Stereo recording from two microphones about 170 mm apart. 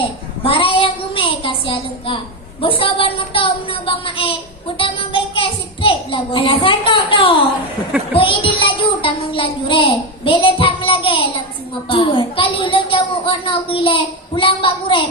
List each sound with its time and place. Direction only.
0.4 s a sound: 30° left (ahead or behind)
2.6 s a child's voice: 30° left (ahead or behind)
10.2 s child singing: 30° left (ahead or behind)
11.9 s a child's voice: 30° left (ahead or behind)